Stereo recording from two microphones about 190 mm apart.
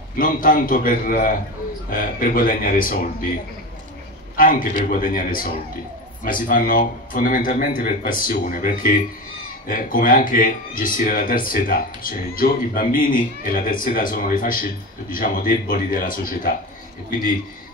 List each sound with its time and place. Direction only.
0.2 s speech: 45° left (ahead or behind)
4.4 s speech: 50° left (ahead or behind)